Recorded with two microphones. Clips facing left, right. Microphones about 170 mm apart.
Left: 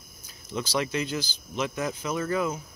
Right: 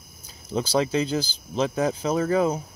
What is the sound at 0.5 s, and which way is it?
Speech, 30° right (ahead or behind).